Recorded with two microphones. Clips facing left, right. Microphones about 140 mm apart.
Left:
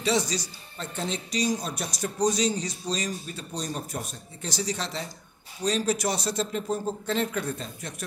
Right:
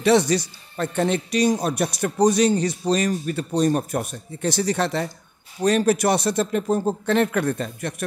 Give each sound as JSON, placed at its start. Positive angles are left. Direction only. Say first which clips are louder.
{"t": 0.0, "sound": "speech", "louder": "right 9 dB", "side_deg": -60}